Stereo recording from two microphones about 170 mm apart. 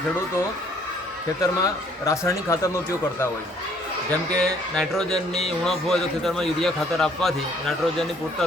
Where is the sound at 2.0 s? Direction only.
15° left (ahead or behind).